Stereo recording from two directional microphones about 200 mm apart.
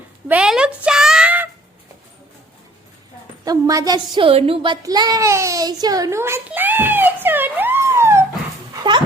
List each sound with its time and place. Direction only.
0.3 s a sound: 5° right (ahead or behind)
3.4 s a child's voice: 15° right (ahead or behind)
8.8 s dog: 20° right (ahead or behind)